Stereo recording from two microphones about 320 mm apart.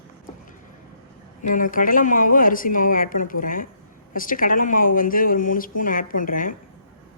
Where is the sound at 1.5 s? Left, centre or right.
Left.